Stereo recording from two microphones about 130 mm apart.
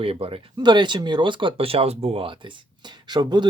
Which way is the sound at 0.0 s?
45° right (ahead or behind).